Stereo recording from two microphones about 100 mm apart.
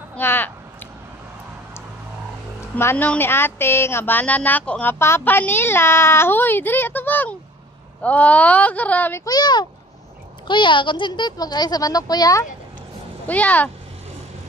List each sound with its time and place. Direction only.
0.2 s a sound: 20° left (ahead or behind)
2.7 s speech: 20° left (ahead or behind)
9.2 s speech: 40° left (ahead or behind)
13.3 s speech: 15° left (ahead or behind)